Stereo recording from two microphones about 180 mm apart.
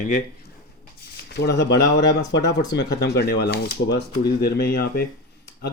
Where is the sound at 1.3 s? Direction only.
70° left (ahead or behind).